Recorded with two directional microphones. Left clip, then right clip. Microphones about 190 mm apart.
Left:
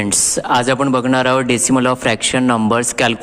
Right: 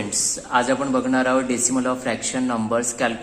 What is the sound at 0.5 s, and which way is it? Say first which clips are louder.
A man's voice: left 5 dB; 50° left (ahead or behind).